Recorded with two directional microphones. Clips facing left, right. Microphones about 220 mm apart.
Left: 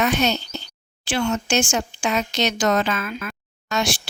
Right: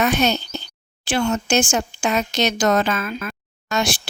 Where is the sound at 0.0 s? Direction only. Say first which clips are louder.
Right 2 dB; 50° right (ahead or behind).